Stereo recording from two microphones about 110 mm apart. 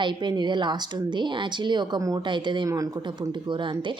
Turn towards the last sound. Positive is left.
turn(degrees=-45)  # may be behind; listen again after turning